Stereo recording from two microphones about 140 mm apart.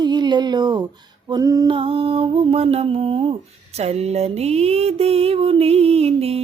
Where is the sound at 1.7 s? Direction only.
40° right (ahead or behind).